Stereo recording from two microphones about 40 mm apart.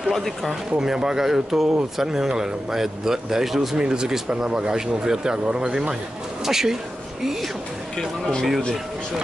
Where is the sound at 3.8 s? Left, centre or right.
Centre.